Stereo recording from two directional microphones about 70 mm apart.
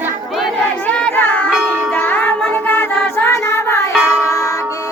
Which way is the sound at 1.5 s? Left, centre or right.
Centre.